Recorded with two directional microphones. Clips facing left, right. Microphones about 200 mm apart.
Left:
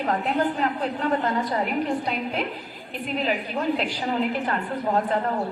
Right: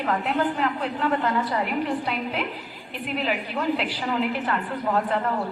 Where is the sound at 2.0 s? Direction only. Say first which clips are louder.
Left 1 dB; 35° left (ahead or behind).